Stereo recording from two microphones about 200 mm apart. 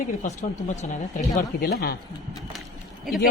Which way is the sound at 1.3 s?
50° left (ahead or behind).